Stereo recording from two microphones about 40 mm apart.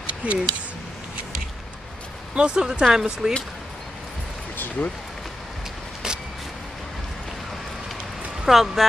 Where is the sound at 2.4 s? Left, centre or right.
Right.